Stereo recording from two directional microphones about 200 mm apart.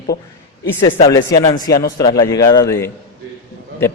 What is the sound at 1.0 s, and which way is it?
Speech, 15° left (ahead or behind).